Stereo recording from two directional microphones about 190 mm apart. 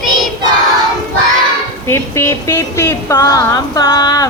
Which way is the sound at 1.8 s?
10° left (ahead or behind).